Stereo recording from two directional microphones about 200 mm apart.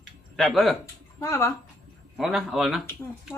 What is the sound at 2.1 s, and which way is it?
Speech, centre (ahead or behind).